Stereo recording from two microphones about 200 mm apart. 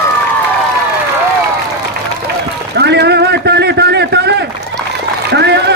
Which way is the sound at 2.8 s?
55° right (ahead or behind).